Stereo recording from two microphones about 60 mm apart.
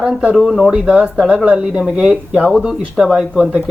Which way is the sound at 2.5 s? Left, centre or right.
Centre.